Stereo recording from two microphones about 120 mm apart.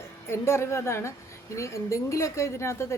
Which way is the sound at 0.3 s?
20° left (ahead or behind).